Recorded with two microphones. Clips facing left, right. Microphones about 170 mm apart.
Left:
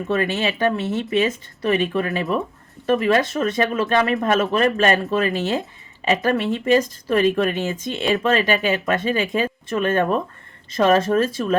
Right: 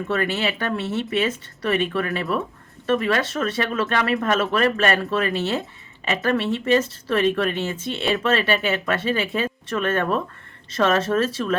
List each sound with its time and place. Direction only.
0.1 s speech: 20° left (ahead or behind)